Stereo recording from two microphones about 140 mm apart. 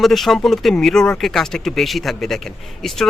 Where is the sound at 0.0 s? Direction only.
Centre (ahead or behind).